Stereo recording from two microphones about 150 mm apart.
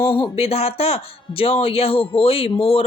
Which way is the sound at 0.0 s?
40° left (ahead or behind).